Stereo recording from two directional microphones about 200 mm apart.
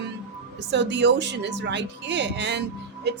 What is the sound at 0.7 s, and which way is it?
Speech, 60° right (ahead or behind).